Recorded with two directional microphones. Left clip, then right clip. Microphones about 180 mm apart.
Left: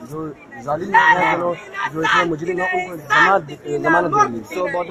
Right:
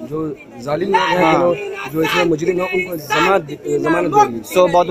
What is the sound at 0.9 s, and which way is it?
A man's voice, 50° right (ahead or behind).